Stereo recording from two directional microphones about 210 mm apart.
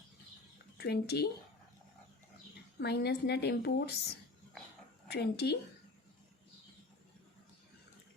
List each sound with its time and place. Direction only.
0.8 s a woman's voice: 50° left (ahead or behind)
2.7 s a woman's voice: 50° left (ahead or behind)